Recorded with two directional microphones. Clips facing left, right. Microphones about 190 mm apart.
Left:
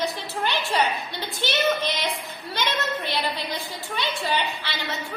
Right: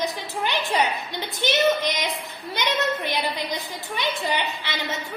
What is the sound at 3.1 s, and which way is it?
A woman's voice, 15° right (ahead or behind).